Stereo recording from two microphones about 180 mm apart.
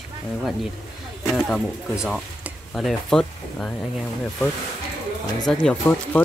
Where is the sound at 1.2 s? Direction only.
5° left (ahead or behind).